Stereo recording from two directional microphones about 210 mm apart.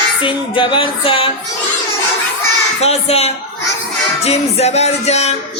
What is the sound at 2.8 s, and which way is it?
Music, 30° left (ahead or behind).